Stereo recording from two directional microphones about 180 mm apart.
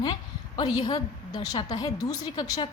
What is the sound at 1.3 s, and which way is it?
A woman's voice, 20° left (ahead or behind).